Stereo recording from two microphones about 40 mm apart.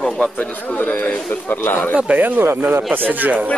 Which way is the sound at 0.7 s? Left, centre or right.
Left.